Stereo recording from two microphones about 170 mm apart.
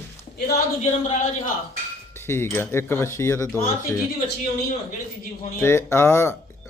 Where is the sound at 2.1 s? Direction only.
15° left (ahead or behind).